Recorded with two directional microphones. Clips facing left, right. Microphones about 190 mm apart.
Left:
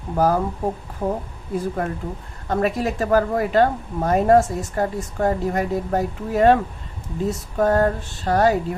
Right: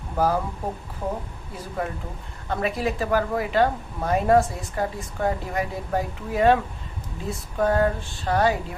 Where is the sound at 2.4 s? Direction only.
45° left (ahead or behind).